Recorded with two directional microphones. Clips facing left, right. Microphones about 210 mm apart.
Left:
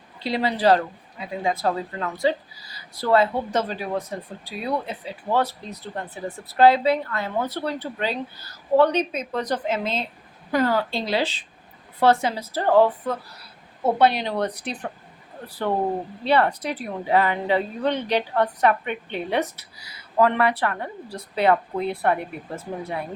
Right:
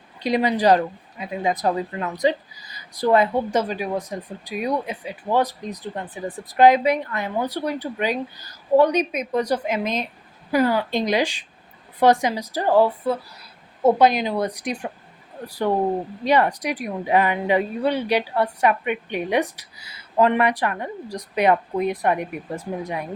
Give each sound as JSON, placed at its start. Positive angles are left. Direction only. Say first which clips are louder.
{"t": 0.2, "sound": "speech", "louder": "right 3 dB", "side_deg": -15}